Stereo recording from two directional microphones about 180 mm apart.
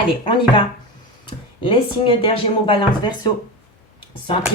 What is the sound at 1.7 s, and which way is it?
Speech, 30° left (ahead or behind).